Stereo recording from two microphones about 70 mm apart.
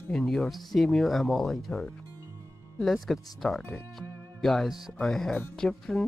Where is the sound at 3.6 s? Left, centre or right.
Left.